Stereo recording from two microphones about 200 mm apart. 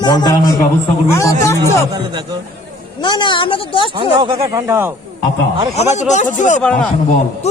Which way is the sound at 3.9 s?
25° right (ahead or behind).